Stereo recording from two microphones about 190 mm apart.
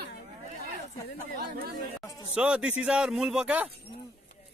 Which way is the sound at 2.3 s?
5° right (ahead or behind).